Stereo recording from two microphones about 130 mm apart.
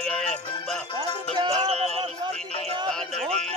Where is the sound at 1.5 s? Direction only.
50° right (ahead or behind).